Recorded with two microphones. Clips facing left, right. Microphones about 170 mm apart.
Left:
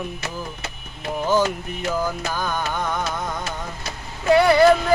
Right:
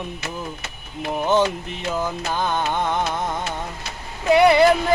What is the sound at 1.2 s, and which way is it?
Speech, 25° right (ahead or behind).